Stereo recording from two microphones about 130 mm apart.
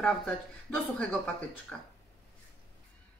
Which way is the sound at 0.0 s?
5° left (ahead or behind).